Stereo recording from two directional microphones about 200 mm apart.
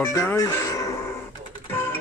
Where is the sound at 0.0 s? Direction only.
10° left (ahead or behind).